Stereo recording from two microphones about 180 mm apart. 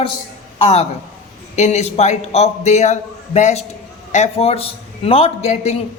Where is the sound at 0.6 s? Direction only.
35° left (ahead or behind).